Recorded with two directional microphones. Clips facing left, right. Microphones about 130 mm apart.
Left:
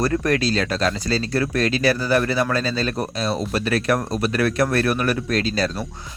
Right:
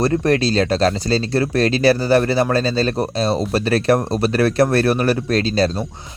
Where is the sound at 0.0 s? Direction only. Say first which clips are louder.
Right 4 dB; 30° right (ahead or behind).